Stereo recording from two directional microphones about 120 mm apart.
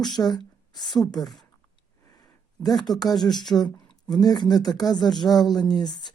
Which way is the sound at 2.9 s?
35° left (ahead or behind).